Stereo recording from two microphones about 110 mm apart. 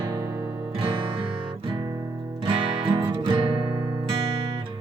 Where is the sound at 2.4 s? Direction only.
55° right (ahead or behind).